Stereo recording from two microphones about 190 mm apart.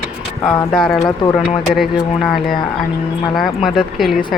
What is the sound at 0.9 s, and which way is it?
Speech, 20° left (ahead or behind).